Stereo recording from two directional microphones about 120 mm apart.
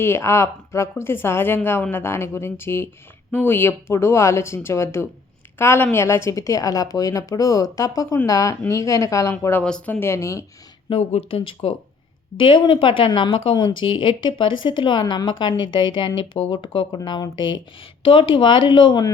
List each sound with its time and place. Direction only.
0.0 s speech: 20° left (ahead or behind)
9.3 s speech: 15° left (ahead or behind)
10.8 s speech: 55° left (ahead or behind)
12.4 s speech: 45° left (ahead or behind)